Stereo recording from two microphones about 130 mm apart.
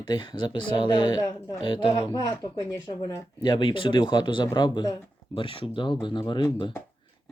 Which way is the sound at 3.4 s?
40° left (ahead or behind).